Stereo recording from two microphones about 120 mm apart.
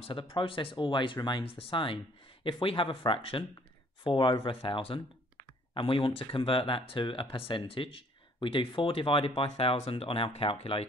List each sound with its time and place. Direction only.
0.0 s speech: 50° left (ahead or behind)